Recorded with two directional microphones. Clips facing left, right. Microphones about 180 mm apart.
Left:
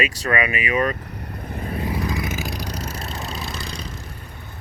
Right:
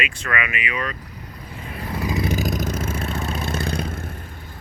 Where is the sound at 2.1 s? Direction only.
30° right (ahead or behind); by 4.0 s 55° right (ahead or behind).